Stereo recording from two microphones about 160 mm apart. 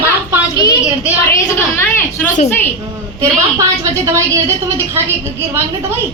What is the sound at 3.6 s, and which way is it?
Speech, 20° right (ahead or behind).